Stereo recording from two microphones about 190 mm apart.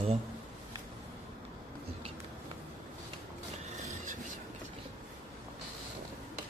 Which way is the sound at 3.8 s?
40° right (ahead or behind).